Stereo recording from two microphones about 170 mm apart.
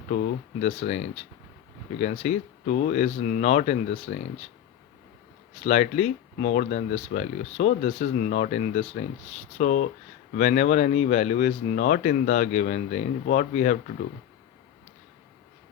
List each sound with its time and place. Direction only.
0.1 s speech: 45° left (ahead or behind)
5.5 s speech: 40° left (ahead or behind)